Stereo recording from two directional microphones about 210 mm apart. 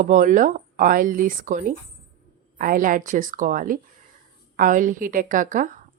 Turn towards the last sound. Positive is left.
turn(degrees=-40)  # may be behind; listen again after turning